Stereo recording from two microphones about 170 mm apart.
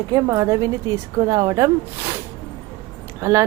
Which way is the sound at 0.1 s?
15° right (ahead or behind).